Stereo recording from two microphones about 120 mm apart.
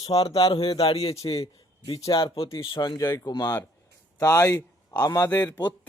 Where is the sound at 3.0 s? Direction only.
20° left (ahead or behind).